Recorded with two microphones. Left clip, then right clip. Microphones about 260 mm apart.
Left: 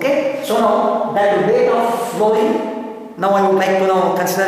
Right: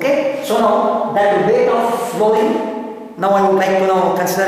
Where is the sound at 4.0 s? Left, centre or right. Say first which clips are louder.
Right 1 dB; centre.